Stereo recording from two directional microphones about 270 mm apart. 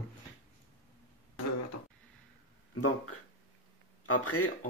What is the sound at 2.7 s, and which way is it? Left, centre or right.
Speech, left.